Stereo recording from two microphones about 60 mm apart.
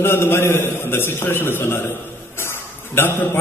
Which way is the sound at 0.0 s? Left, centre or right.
Left.